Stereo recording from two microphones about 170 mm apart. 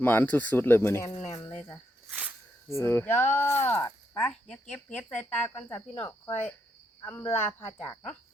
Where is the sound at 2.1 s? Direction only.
10° right (ahead or behind).